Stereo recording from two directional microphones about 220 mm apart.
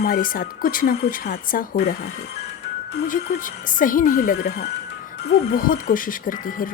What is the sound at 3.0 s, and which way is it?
A woman's voice, 35° left (ahead or behind).